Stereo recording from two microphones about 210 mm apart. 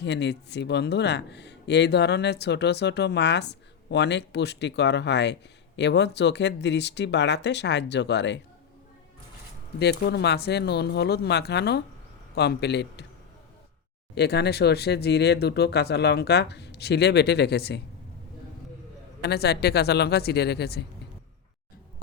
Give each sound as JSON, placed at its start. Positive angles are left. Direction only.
{"t": 0.0, "sound": "speech", "side_deg": 55}
{"t": 9.7, "sound": "speech", "side_deg": 50}
{"t": 14.2, "sound": "speech", "side_deg": 50}
{"t": 19.2, "sound": "speech", "side_deg": 50}